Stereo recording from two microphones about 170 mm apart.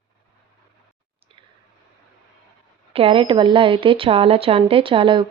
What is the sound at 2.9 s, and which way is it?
A woman's voice, 35° right (ahead or behind).